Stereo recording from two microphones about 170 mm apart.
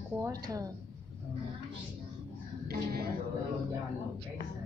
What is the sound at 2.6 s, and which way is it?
Speech, 65° right (ahead or behind).